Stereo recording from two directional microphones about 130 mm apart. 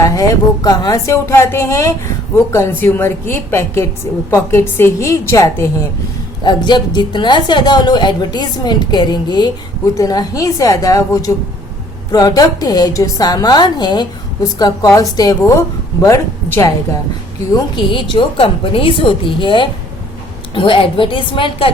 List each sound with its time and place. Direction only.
0.0 s a woman's voice: 30° left (ahead or behind)
6.4 s a woman's voice: 35° left (ahead or behind)
17.9 s a woman's voice: 40° left (ahead or behind)